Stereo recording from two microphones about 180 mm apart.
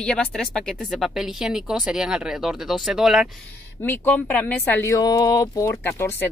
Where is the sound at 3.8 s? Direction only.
10° left (ahead or behind).